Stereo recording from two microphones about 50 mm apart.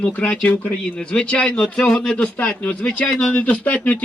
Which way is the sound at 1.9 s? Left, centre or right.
Centre.